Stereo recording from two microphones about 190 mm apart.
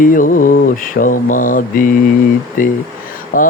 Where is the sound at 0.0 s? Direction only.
45° left (ahead or behind).